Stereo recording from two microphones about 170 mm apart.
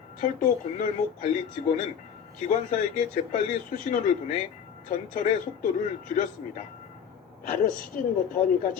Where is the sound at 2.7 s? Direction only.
50° left (ahead or behind).